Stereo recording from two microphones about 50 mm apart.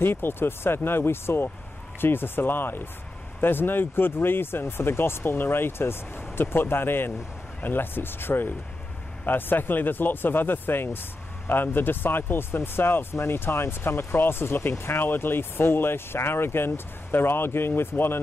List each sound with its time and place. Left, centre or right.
0.0 s speech: left